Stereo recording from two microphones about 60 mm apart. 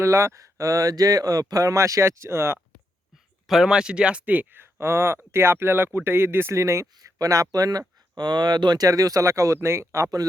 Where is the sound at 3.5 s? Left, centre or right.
Centre; by 6.9 s right.